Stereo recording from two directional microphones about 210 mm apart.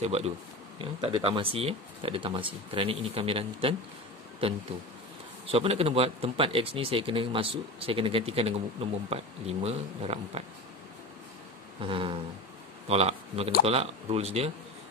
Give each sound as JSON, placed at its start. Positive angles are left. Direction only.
{"t": 0.0, "sound": "speech", "side_deg": -30}
{"t": 5.5, "sound": "speech", "side_deg": -25}
{"t": 11.8, "sound": "speech", "side_deg": -25}